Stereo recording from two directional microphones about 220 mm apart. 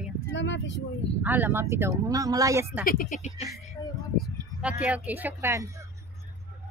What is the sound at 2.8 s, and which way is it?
Speech, 40° left (ahead or behind).